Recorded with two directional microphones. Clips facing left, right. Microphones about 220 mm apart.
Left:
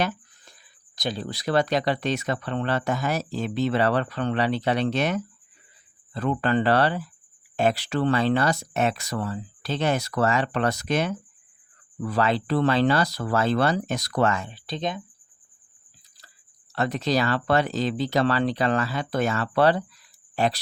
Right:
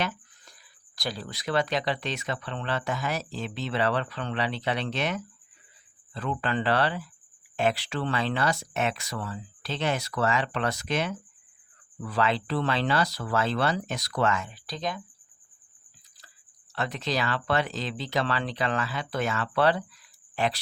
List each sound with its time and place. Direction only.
0.9 s speech: 20° left (ahead or behind)
1.3 s speech: 35° left (ahead or behind)
16.7 s speech: 40° left (ahead or behind)